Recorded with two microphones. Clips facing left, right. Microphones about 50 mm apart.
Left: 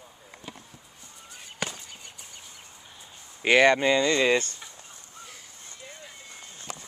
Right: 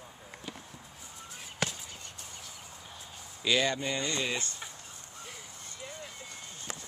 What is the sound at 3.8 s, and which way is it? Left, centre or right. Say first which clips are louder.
Speech: left 11 dB; left.